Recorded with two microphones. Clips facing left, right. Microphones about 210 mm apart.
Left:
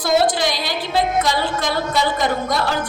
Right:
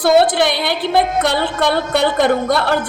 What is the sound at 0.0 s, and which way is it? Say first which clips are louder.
A woman's voice: right 5 dB; 60° right (ahead or behind).